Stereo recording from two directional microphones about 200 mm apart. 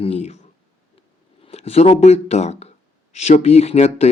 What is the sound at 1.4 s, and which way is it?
A man's voice, 30° left (ahead or behind).